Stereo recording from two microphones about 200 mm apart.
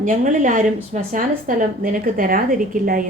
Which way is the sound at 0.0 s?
40° right (ahead or behind).